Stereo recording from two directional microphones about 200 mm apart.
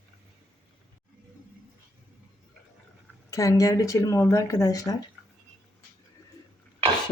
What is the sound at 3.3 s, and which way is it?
Speech, 15° left (ahead or behind).